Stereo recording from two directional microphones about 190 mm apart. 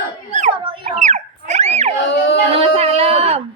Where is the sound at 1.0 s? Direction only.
40° right (ahead or behind).